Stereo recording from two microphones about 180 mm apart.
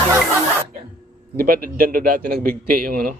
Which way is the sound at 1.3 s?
55° right (ahead or behind).